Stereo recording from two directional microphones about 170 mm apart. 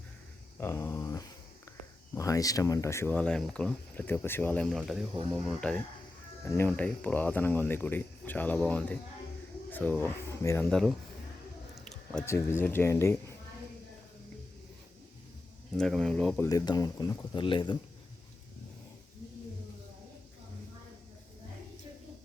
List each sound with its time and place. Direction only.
0.6 s a sound: 15° left (ahead or behind)
2.1 s speech: 20° left (ahead or behind)
10.6 s speech: 5° left (ahead or behind)
11.7 s a sound: centre (ahead or behind)
12.2 s speech: 15° left (ahead or behind)
15.8 s speech: 5° left (ahead or behind)
16.5 s speech: 20° left (ahead or behind)